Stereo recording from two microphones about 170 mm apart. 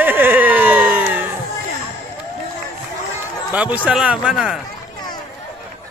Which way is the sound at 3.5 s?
10° right (ahead or behind).